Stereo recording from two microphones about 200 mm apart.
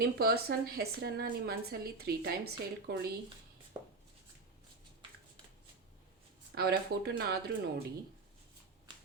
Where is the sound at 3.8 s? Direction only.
20° right (ahead or behind).